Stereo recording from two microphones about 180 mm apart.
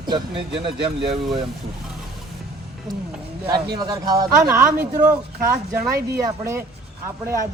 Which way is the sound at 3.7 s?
20° right (ahead or behind).